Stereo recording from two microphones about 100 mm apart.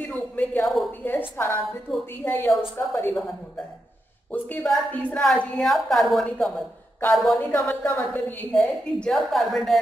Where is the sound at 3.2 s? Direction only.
5° left (ahead or behind).